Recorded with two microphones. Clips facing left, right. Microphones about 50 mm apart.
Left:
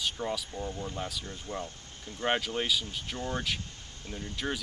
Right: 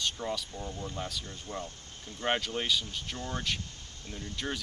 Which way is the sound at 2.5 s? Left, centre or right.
Centre.